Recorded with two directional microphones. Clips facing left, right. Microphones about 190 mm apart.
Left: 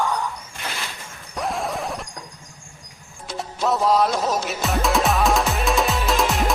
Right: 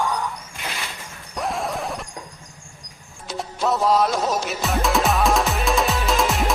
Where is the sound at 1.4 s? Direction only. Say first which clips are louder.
Even; centre (ahead or behind).